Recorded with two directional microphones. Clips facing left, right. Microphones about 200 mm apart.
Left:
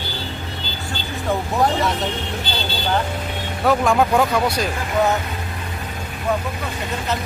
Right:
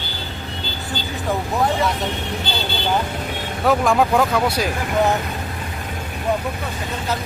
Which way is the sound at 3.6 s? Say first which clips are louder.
Even; centre (ahead or behind).